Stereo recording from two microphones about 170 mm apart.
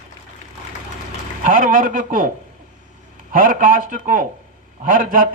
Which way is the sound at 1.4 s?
55° right (ahead or behind).